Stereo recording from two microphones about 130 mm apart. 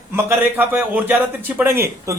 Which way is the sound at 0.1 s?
15° right (ahead or behind).